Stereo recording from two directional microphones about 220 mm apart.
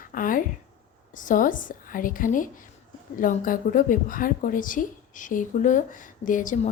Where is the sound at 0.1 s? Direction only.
40° left (ahead or behind).